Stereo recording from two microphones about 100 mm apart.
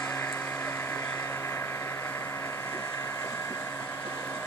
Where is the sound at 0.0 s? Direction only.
20° left (ahead or behind).